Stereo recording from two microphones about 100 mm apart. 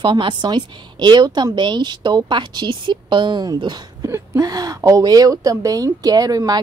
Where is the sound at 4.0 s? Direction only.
30° right (ahead or behind).